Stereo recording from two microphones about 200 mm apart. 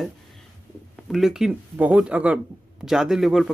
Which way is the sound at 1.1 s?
Centre (ahead or behind).